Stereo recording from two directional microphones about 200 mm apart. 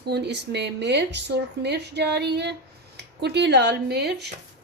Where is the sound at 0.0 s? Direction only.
55° right (ahead or behind).